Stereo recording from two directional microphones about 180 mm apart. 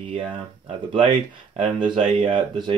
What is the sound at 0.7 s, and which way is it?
Speech, 30° right (ahead or behind).